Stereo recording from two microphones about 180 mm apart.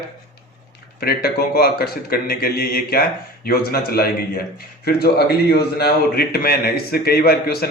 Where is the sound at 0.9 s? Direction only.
55° left (ahead or behind).